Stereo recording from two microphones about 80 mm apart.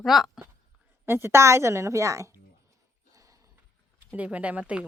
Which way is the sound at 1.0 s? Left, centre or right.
Right.